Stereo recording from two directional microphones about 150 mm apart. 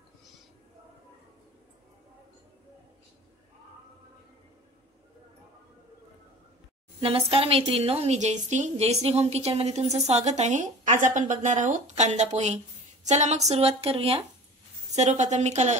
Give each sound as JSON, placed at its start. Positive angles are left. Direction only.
{"t": 7.0, "sound": "a woman's voice", "side_deg": -40}